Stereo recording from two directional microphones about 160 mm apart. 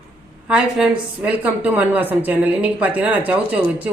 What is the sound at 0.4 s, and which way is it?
A woman's voice, 5° right (ahead or behind).